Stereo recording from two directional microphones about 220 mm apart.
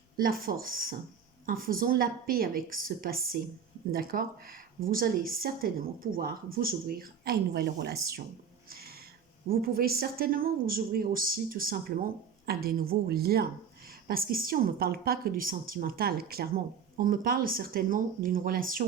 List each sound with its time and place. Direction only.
0.2 s speech: 40° right (ahead or behind)
8.7 s a sound: 45° right (ahead or behind)
9.5 s speech: 40° right (ahead or behind)